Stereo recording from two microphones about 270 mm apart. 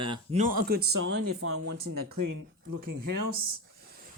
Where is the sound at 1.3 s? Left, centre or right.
Right.